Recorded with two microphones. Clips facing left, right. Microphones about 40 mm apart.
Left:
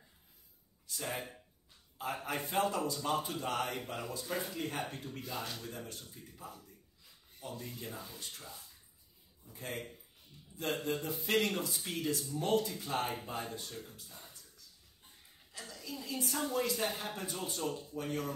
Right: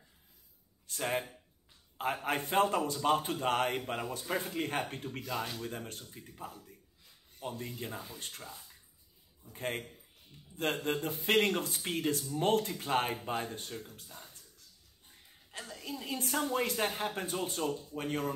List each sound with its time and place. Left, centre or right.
0.8 s speech: right
2.2 s speech: right
9.5 s a man's voice: right
15.5 s a sound: right
15.9 s speech: right